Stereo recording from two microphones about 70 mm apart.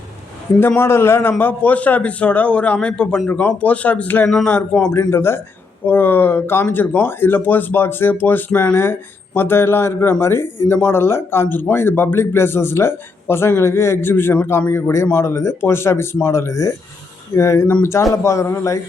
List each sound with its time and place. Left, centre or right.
0.8 s a man's voice: left